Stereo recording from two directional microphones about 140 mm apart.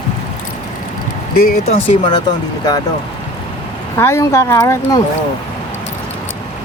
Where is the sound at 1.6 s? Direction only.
45° left (ahead or behind).